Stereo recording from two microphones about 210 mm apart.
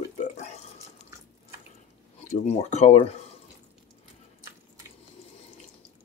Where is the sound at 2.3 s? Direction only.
30° left (ahead or behind).